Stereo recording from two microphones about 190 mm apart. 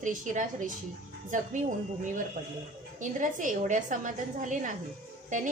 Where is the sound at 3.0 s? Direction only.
40° right (ahead or behind).